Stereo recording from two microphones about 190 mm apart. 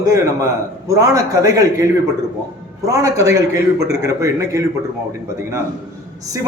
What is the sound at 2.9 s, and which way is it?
A man's voice, 15° right (ahead or behind).